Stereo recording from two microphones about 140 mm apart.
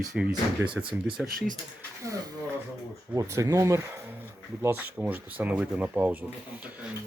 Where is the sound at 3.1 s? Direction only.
20° right (ahead or behind).